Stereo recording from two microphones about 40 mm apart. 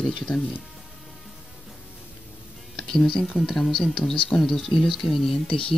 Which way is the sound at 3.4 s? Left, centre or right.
Centre.